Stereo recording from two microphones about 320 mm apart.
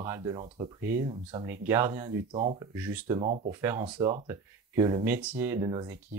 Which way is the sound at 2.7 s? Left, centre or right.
Centre.